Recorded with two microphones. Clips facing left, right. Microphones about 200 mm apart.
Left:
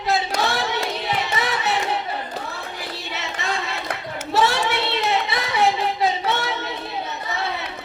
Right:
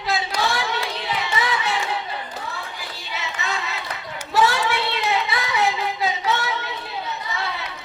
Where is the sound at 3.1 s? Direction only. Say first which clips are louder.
Even; 50° left (ahead or behind).